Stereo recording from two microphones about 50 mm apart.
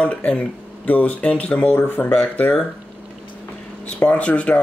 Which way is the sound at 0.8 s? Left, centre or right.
Left.